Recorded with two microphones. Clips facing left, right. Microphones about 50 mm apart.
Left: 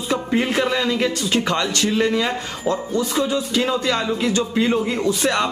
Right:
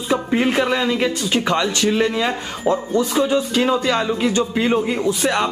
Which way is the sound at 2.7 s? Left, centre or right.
Right.